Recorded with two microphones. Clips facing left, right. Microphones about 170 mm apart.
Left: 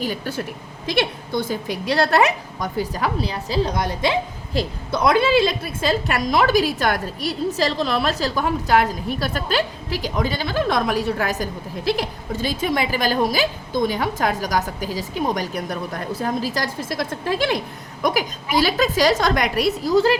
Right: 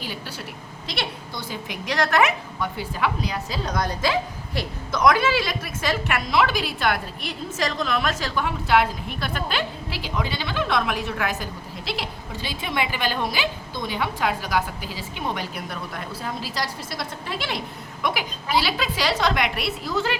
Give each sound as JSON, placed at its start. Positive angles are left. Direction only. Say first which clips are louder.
{"t": 0.0, "sound": "a woman's voice", "louder": "left 8 dB", "side_deg": 45}
{"t": 1.6, "sound": "a woman's voice", "louder": "even", "side_deg": 35}